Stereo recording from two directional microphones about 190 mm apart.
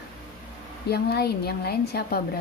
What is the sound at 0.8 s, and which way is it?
A woman's voice, 55° left (ahead or behind).